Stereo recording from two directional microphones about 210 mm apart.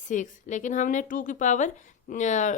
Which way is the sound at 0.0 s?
35° left (ahead or behind).